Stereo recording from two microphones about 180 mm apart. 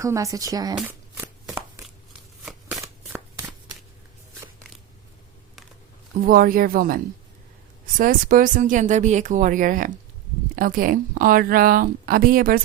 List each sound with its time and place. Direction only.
0.0 s speech: 15° right (ahead or behind)
2.4 s shuffling cards: centre (ahead or behind)
2.7 s shuffling cards: 15° right (ahead or behind)
6.2 s a woman's voice: 50° right (ahead or behind)